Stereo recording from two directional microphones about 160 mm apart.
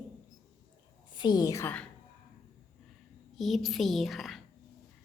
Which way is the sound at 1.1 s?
25° left (ahead or behind).